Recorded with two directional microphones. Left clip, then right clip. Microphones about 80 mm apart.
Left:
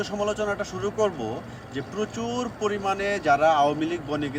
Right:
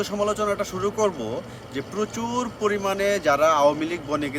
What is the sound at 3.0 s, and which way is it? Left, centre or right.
A man's voice, right.